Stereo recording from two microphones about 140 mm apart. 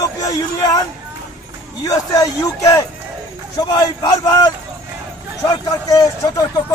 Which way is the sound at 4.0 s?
30° left (ahead or behind).